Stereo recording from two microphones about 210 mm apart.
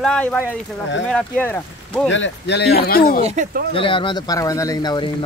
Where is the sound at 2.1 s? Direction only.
60° left (ahead or behind).